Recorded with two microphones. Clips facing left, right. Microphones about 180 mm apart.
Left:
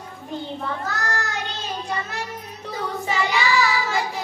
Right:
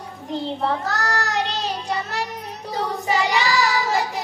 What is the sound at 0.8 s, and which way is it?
Child singing, 75° right (ahead or behind).